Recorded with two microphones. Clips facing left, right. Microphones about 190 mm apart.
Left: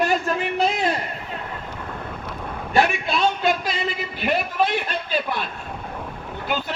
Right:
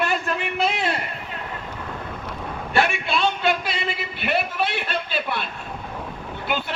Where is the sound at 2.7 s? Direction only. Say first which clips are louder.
Left 2 dB; 40° left (ahead or behind).